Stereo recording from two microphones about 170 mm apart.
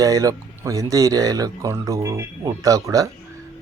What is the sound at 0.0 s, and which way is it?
Speech, 20° right (ahead or behind).